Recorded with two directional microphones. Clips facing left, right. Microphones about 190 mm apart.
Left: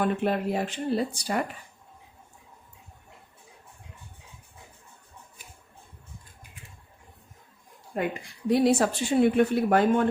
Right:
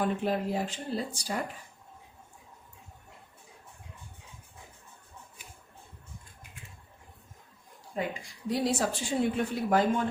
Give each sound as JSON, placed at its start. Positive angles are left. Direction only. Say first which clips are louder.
{"t": 0.0, "sound": "a woman's voice", "louder": "left 3 dB", "side_deg": 65}
{"t": 7.9, "sound": "a woman's voice", "louder": "left 4 dB", "side_deg": 60}